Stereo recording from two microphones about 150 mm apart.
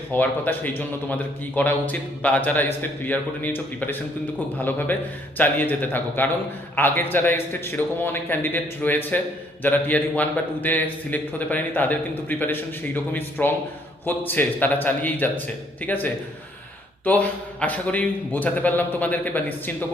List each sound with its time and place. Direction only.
0.1 s a man's voice: 10° left (ahead or behind)